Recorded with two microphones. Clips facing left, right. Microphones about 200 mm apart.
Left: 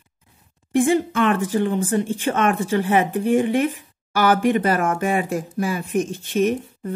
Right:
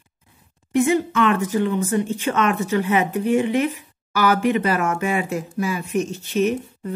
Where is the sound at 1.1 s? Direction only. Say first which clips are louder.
Even; 50° left (ahead or behind).